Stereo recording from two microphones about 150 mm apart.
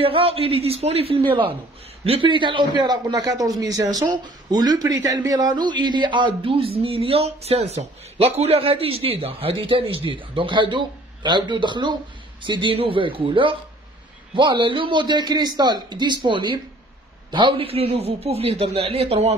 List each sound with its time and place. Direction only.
0.0 s a man's voice: 40° right (ahead or behind)